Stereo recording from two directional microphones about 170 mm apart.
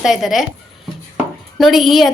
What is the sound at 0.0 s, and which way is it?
Speech, centre (ahead or behind).